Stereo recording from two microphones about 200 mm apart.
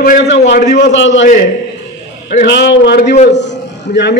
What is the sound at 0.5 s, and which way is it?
Speech, 55° left (ahead or behind).